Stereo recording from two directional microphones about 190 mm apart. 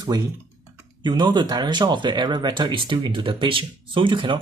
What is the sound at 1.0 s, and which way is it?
Speech, 25° right (ahead or behind).